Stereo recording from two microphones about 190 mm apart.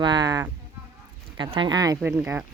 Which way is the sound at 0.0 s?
20° right (ahead or behind).